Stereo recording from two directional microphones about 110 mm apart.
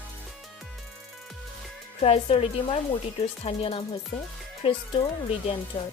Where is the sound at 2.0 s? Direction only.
65° left (ahead or behind).